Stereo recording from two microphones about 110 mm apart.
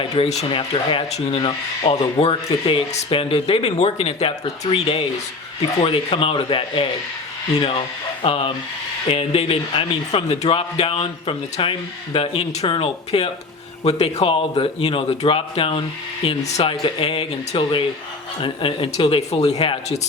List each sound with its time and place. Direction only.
0.2 s a man's voice: 55° left (ahead or behind)
5.8 s a man's voice: 55° left (ahead or behind)
8.2 s a man's voice: 55° left (ahead or behind)
13.1 s speech: 70° left (ahead or behind)
14.3 s a man's voice: 60° left (ahead or behind)
16.4 s speech: 90° left
16.8 s a man's voice: 55° left (ahead or behind)